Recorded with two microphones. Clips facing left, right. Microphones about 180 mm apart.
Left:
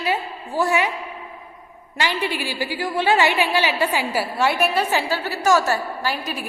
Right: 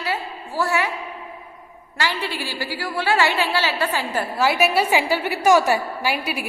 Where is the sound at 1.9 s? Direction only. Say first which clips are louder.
Left 2 dB; 15° left (ahead or behind).